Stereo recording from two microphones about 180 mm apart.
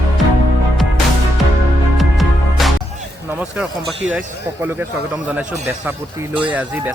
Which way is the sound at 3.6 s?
5° right (ahead or behind).